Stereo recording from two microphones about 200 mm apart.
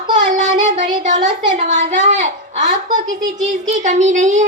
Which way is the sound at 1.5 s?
35° right (ahead or behind).